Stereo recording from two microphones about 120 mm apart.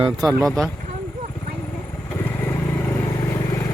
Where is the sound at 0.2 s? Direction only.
30° right (ahead or behind).